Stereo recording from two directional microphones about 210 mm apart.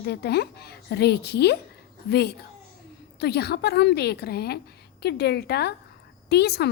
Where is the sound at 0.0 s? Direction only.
50° left (ahead or behind).